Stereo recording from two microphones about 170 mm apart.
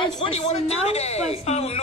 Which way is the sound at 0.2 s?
35° left (ahead or behind).